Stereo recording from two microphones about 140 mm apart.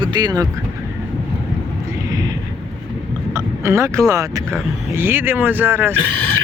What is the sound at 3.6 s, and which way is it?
Speech, 20° right (ahead or behind).